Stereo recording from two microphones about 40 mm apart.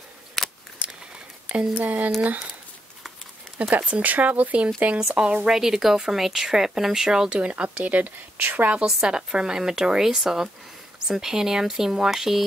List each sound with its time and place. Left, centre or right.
0.4 s scissors: centre
1.8 s speech: right
3.7 s speech: right
5.5 s speech: centre
7.2 s speech: right
8.8 s a woman's voice: centre